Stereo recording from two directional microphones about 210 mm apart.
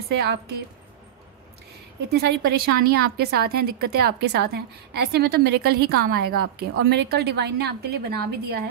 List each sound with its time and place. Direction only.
0.2 s a woman's voice: 50° right (ahead or behind)
2.1 s a woman's voice: 50° right (ahead or behind)